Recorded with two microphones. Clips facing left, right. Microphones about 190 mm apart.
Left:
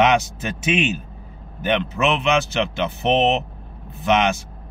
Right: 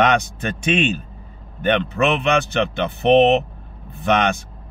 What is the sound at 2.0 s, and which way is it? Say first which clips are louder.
Speech: right 1 dB; 55° right (ahead or behind).